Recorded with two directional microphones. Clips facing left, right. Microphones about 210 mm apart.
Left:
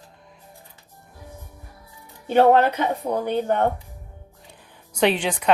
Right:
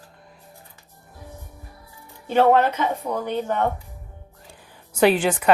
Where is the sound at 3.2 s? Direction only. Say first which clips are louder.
Left 4 dB; 55° left (ahead or behind).